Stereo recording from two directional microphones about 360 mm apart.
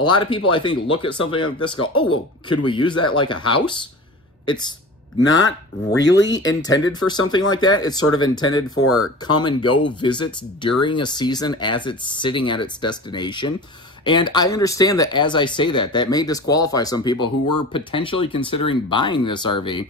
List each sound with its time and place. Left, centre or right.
0.0 s speech: centre
1.8 s speech: left
2.7 s speech: centre
5.9 s speech: centre
8.7 s speech: left
9.3 s speech: centre
9.7 s speech: left
9.9 s speech: centre